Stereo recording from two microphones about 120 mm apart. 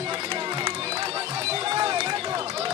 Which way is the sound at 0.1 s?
45° right (ahead or behind).